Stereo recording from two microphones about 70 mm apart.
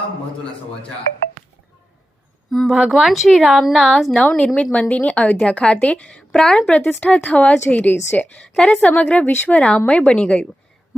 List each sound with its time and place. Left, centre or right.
2.5 s speech: centre
4.1 s a woman's voice: centre
9.6 s a woman's voice: centre